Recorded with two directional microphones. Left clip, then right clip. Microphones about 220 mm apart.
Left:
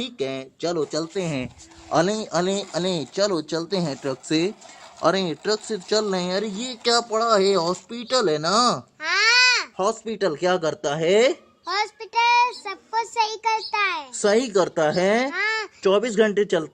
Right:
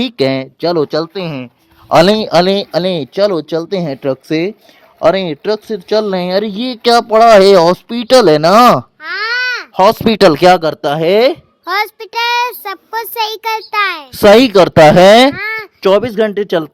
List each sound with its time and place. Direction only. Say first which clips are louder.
0.0 s speech: right 14 dB; 50° right (ahead or behind); by 1.5 s 25° right (ahead or behind)
1.9 s speech: right 13 dB; 50° right (ahead or behind)
9.0 s baby cry: right 1 dB; centre (ahead or behind)
9.7 s speech: right 15 dB; 50° right (ahead or behind)
10.6 s speech: right 10 dB; 30° right (ahead or behind)
14.1 s speech: right 18 dB; 45° right (ahead or behind)
15.4 s a sound: right 4 dB; 5° left (ahead or behind)
15.8 s speech: right 10 dB; 35° right (ahead or behind)
16.0 s a man's voice: right 6 dB; 20° right (ahead or behind)